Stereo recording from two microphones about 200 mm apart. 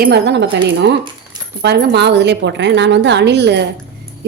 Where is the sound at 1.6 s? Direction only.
55° right (ahead or behind).